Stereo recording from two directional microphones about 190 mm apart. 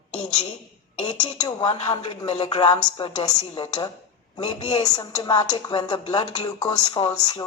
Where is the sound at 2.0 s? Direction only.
30° left (ahead or behind).